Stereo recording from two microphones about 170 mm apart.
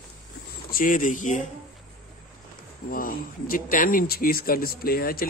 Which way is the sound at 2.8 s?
55° left (ahead or behind).